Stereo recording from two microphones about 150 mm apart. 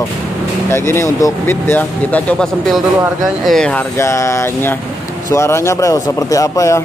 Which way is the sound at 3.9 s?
20° left (ahead or behind).